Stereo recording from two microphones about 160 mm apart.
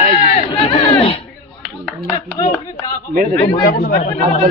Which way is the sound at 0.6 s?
35° left (ahead or behind).